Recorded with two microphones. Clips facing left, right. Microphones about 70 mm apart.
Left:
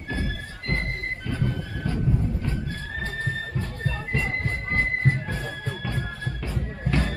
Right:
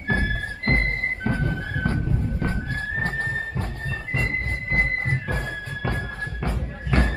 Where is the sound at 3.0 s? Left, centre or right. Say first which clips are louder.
Right 2 dB; right.